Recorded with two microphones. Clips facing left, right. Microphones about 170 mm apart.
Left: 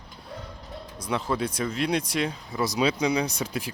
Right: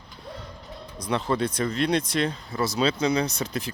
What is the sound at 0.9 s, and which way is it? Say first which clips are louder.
Speech: right 2 dB; 10° left (ahead or behind).